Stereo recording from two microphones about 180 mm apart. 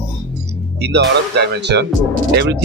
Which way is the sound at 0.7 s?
70° right (ahead or behind).